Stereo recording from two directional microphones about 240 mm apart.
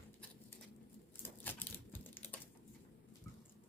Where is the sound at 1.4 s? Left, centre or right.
Centre.